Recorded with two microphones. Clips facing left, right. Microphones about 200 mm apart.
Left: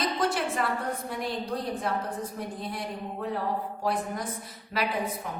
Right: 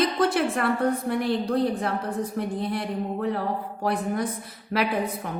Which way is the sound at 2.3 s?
65° right (ahead or behind).